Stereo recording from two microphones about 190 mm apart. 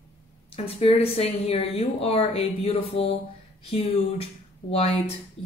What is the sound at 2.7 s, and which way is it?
Mantra, 30° left (ahead or behind).